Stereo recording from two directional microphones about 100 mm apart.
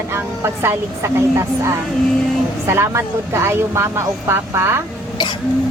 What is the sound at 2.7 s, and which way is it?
A woman's voice, 25° right (ahead or behind).